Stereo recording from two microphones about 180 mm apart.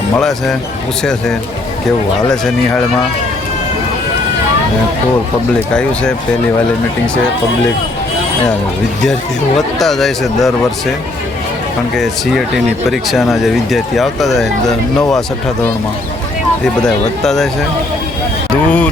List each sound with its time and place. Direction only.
0.2 s speech: centre (ahead or behind)
2.3 s speech: 5° left (ahead or behind)
5.7 s speech: 5° left (ahead or behind)
9.6 s speech: centre (ahead or behind)
12.9 s speech: centre (ahead or behind)
16.8 s speech: centre (ahead or behind)
18.5 s speech: 10° left (ahead or behind)